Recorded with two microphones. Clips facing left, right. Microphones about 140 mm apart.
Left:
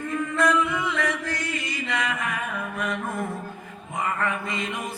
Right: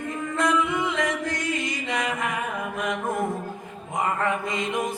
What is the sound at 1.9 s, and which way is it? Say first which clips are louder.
Music: even; 25° right (ahead or behind).